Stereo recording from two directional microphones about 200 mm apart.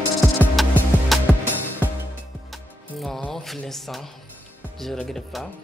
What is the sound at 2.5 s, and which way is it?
Speech, centre (ahead or behind).